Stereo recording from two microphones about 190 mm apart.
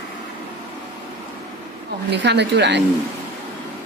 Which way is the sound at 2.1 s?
65° right (ahead or behind).